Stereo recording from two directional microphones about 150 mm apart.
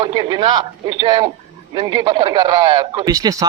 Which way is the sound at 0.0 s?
30° right (ahead or behind).